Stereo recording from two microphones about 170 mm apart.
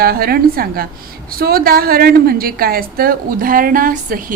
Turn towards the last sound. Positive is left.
turn(degrees=-55)  # may be behind; listen again after turning